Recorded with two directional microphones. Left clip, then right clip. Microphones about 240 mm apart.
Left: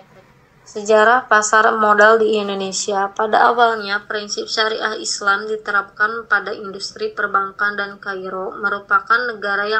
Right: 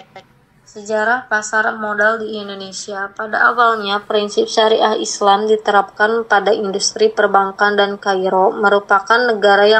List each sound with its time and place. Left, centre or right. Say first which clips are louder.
0.7 s speech: left 4 dB; left
1.8 s a woman's voice: left 5 dB; left
3.9 s a woman's voice: right 6 dB; centre